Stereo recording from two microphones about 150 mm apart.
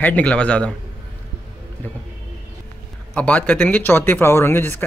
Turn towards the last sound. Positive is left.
turn(degrees=15)  # may be behind; listen again after turning